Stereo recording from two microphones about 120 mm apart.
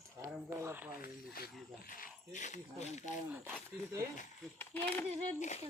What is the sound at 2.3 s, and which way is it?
Speech, 85° left.